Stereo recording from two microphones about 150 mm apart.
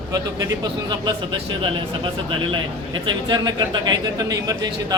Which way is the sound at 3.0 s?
30° right (ahead or behind).